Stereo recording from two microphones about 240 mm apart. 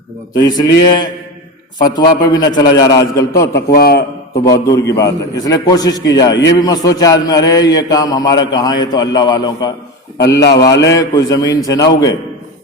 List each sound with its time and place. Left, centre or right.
0.3 s a man's voice: centre
3.5 s a man's voice: left
4.4 s a man's voice: centre
6.3 s a man's voice: left
6.7 s a man's voice: centre
10.7 s a man's voice: left
10.9 s a man's voice: centre